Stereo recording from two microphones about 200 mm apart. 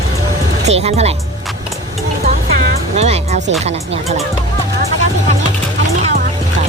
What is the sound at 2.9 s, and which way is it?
Music, 35° right (ahead or behind).